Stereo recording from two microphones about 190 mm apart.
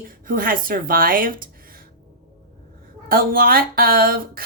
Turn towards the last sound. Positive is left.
turn(degrees=-50)  # may be behind; listen again after turning